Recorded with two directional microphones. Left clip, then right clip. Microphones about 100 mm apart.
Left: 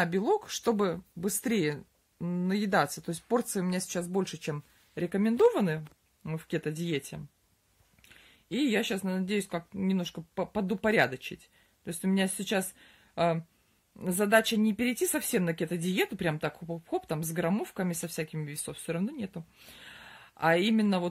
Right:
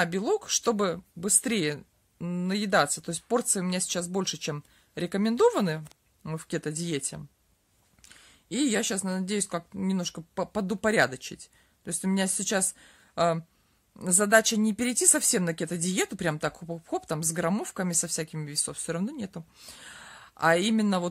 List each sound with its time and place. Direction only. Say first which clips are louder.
0.0 s speech: right 1 dB; 40° right (ahead or behind)
8.5 s speech: right 1 dB; 50° right (ahead or behind)
10.3 s speech: right 1 dB; 55° right (ahead or behind)